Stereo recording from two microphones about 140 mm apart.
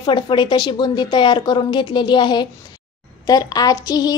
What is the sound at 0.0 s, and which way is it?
A woman's voice, 35° left (ahead or behind).